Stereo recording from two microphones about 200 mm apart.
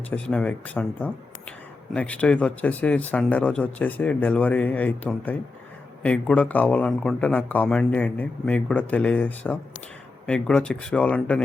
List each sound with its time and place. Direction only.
0.1 s speech: 5° left (ahead or behind)